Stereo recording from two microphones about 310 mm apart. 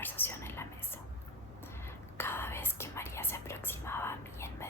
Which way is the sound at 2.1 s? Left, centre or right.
Centre.